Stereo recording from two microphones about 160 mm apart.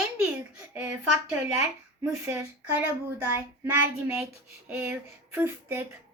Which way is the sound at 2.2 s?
15° right (ahead or behind).